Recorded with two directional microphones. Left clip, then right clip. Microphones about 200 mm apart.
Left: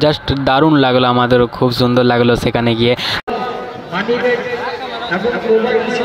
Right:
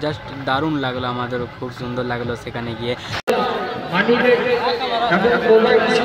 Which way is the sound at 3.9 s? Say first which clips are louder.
Even; 55° right (ahead or behind).